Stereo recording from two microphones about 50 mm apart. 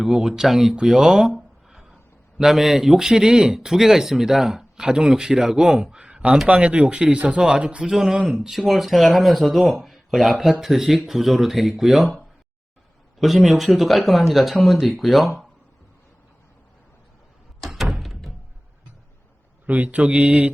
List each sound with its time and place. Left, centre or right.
0.0 s speech: centre
1.4 s a sound: centre
2.4 s speech: centre
13.1 s speech: centre
17.7 s door: centre
19.6 s speech: right